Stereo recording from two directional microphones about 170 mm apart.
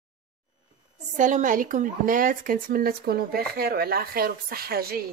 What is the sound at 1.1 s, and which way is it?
Speech, 50° right (ahead or behind).